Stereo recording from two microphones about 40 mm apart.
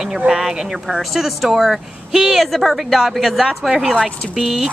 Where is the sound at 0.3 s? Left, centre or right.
Centre.